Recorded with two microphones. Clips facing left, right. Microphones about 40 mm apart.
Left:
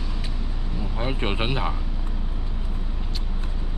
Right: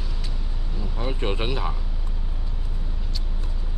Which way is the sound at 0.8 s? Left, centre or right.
Left.